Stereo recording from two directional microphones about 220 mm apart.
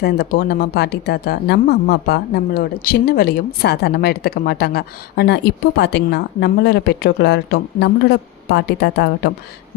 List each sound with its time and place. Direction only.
0.0 s speech: 45° left (ahead or behind)